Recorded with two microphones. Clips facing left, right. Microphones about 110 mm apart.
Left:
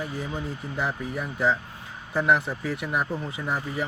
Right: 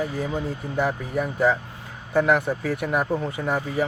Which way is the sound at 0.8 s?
50° right (ahead or behind).